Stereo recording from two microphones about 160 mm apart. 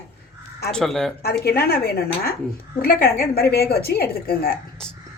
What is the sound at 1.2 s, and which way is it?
A woman's voice, 80° left.